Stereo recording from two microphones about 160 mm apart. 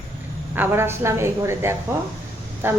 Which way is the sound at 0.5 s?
15° right (ahead or behind).